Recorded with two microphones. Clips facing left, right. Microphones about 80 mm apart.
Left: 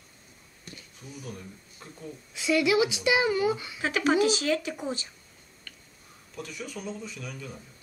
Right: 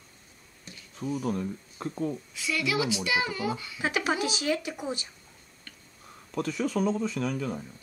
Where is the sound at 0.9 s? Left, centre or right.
Right.